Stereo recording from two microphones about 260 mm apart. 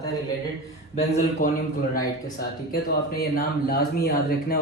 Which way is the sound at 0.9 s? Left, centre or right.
Left.